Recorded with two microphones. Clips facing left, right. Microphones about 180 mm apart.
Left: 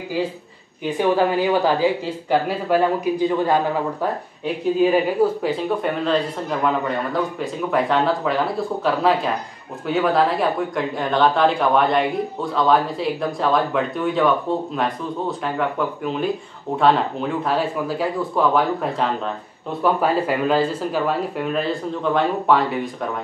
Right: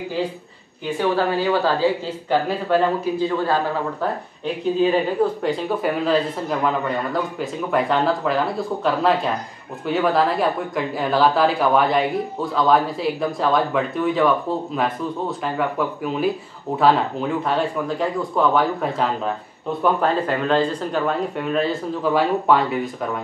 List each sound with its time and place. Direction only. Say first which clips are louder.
0.9 s speech: left 2 dB; 15° left (ahead or behind)
4.7 s speech: left 1 dB; 10° left (ahead or behind)